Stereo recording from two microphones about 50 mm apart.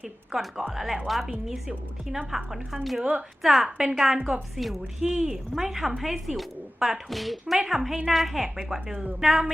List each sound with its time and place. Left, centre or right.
0.3 s a woman's voice: centre
3.0 s a woman's voice: right
3.4 s a woman's voice: centre